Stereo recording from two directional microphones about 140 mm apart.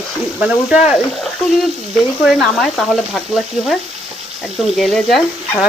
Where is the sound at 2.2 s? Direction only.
Centre (ahead or behind).